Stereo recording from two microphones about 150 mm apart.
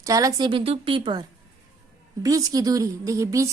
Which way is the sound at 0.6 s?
40° right (ahead or behind).